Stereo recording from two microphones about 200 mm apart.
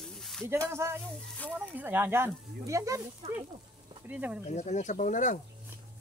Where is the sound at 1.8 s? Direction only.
10° right (ahead or behind).